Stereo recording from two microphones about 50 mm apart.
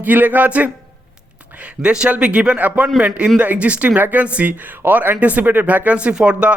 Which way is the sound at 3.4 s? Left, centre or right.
Right.